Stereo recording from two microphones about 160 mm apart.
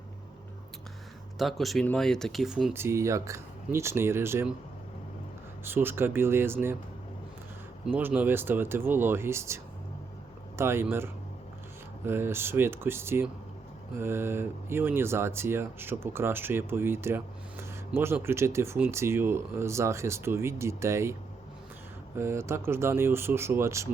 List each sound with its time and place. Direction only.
1.4 s speech: centre (ahead or behind)
2.7 s speech: 15° right (ahead or behind)
5.6 s speech: 15° right (ahead or behind)
7.9 s speech: 10° right (ahead or behind)
10.6 s speech: 15° right (ahead or behind)